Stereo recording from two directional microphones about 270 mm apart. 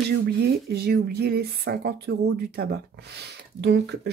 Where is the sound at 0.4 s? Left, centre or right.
Right.